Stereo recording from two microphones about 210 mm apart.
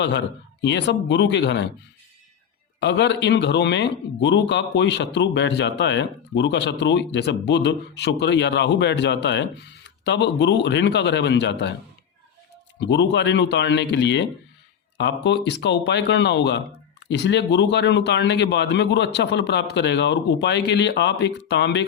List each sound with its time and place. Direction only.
0.6 s speech: 55° left (ahead or behind)
2.8 s speech: 55° left (ahead or behind)
12.8 s speech: 55° left (ahead or behind)